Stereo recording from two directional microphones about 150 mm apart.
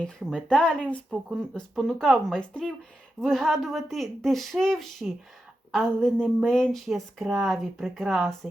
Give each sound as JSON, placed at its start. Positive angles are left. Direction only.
{"t": 0.0, "sound": "speech", "side_deg": 5}